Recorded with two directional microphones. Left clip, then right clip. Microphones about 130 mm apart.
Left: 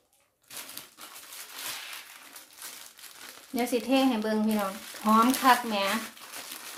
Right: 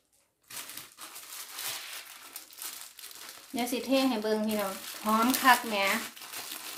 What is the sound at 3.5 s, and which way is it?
Speech, 40° left (ahead or behind).